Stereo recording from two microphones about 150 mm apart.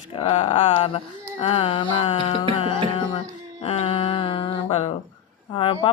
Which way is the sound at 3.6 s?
45° left (ahead or behind).